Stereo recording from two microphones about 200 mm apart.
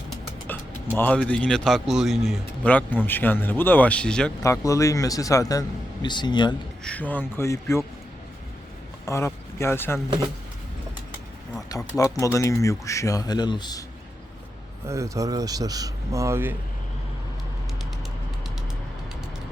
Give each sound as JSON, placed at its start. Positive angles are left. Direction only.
{"t": 0.4, "sound": "speech", "side_deg": 10}
{"t": 4.4, "sound": "speech", "side_deg": 15}
{"t": 6.8, "sound": "speech", "side_deg": 5}
{"t": 9.0, "sound": "speech", "side_deg": 15}
{"t": 11.9, "sound": "speech", "side_deg": 15}
{"t": 14.8, "sound": "speech", "side_deg": -15}